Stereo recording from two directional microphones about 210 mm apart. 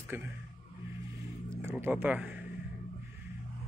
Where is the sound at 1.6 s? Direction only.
10° right (ahead or behind).